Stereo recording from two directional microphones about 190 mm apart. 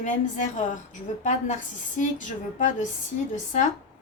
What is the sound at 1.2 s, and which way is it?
Speech, 40° left (ahead or behind).